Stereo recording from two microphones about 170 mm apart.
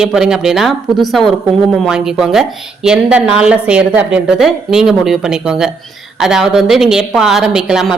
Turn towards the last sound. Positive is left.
turn(degrees=-5)  # may be behind; listen again after turning